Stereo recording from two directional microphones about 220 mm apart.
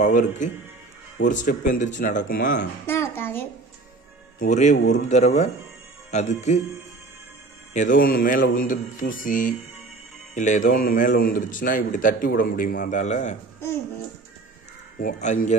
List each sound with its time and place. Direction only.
0.0 s a man's voice: 35° left (ahead or behind)
2.9 s music: 10° left (ahead or behind)
4.4 s a man's voice: 35° left (ahead or behind)
7.7 s a man's voice: 35° left (ahead or behind)
15.0 s a man's voice: 35° left (ahead or behind)